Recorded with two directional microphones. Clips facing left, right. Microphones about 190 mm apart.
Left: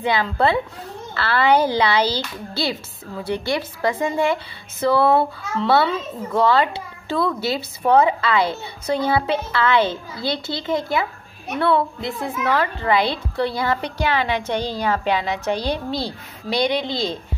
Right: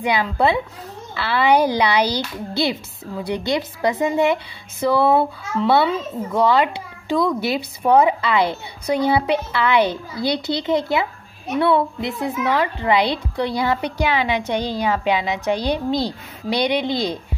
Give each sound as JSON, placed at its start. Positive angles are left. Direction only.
{"t": 0.0, "sound": "a woman's voice", "side_deg": -15}